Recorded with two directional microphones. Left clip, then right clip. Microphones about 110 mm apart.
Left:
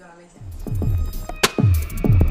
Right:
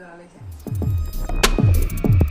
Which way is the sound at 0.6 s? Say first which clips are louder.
Even; centre (ahead or behind).